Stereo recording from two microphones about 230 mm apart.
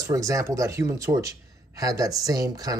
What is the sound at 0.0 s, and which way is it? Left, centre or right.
Speech, centre.